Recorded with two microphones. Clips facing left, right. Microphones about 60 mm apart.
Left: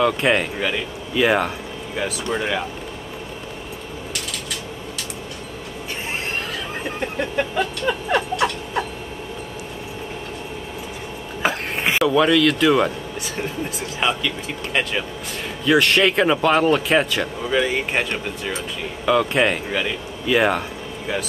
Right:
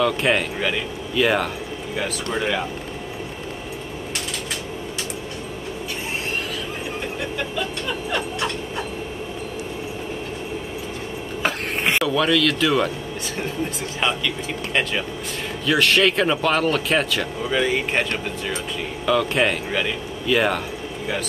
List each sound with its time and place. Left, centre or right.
0.0 s speech: centre
7.5 s music: left
11.4 s a sound: centre
12.1 s speech: centre
13.9 s speech: centre